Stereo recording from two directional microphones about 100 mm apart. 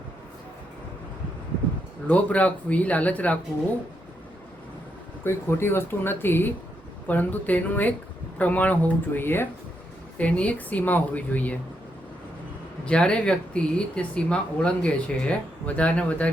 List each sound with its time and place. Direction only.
2.0 s speech: 15° left (ahead or behind)
5.2 s speech: 25° left (ahead or behind)
12.8 s speech: 10° left (ahead or behind)